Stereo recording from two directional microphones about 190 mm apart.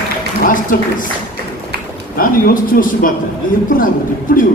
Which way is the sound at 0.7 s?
50° left (ahead or behind).